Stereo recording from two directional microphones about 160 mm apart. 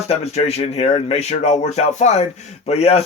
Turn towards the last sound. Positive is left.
turn(degrees=40)  # may be behind; listen again after turning